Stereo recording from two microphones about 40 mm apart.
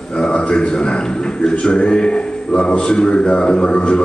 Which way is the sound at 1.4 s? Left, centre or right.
Left.